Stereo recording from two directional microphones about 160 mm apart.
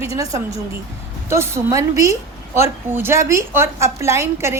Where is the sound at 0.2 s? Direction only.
20° right (ahead or behind).